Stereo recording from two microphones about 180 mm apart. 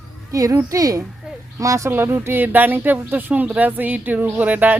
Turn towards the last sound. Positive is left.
turn(degrees=-10)  # may be behind; listen again after turning